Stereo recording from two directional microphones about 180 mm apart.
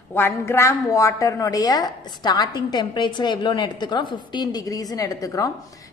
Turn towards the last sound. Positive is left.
turn(degrees=20)  # may be behind; listen again after turning